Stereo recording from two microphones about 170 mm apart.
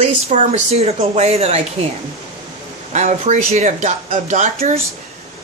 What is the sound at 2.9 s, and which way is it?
Speech, 45° right (ahead or behind).